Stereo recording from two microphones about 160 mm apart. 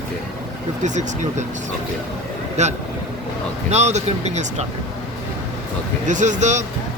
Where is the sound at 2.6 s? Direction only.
45° right (ahead or behind).